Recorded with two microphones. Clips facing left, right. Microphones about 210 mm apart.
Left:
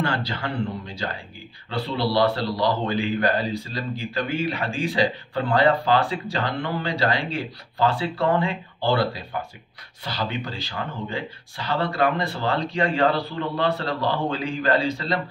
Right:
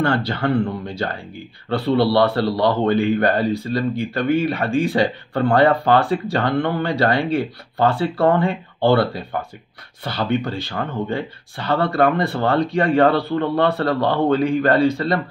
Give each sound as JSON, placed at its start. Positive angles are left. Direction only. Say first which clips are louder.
{"t": 0.0, "sound": "speech", "louder": "right 7 dB", "side_deg": -55}